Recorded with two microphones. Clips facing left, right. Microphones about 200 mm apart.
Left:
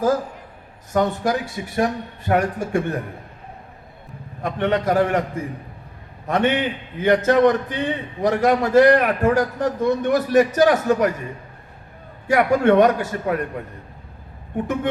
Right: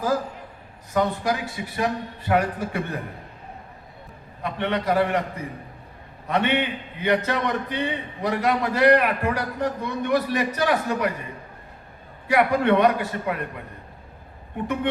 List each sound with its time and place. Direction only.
0.9 s a man's voice: 45° left (ahead or behind)
4.4 s a man's voice: 45° left (ahead or behind)
6.2 s a man's voice: 45° left (ahead or behind)
12.3 s a man's voice: 45° left (ahead or behind)